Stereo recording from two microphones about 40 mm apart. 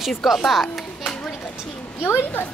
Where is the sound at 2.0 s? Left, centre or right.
Left.